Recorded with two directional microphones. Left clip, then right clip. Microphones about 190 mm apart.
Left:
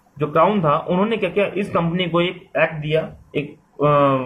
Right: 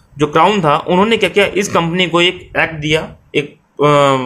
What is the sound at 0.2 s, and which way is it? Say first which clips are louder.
A man's voice: right 5 dB; 40° right (ahead or behind).